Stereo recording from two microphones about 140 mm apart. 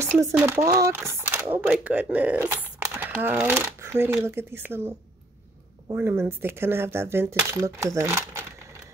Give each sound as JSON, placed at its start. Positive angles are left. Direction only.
{"t": 0.0, "sound": "a sound", "side_deg": -20}
{"t": 0.5, "sound": "speech", "side_deg": -25}
{"t": 5.9, "sound": "speech", "side_deg": -15}